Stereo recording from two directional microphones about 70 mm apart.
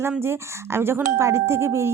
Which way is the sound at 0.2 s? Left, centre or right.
Right.